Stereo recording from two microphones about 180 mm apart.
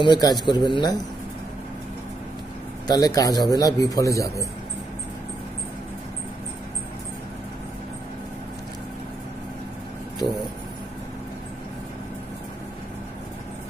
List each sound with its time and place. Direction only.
0.0 s a man's voice: 25° left (ahead or behind)
2.9 s a man's voice: 20° left (ahead or behind)